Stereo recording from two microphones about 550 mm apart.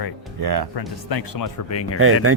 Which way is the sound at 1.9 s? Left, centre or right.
Right.